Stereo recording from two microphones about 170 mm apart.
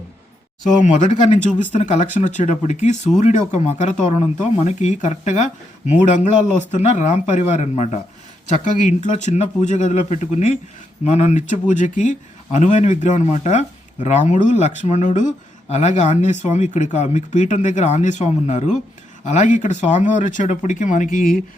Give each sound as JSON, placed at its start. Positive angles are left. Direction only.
{"t": 0.7, "sound": "speech", "side_deg": 45}